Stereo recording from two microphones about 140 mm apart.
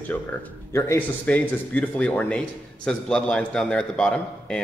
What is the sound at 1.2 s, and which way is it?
A man's voice, 10° left (ahead or behind).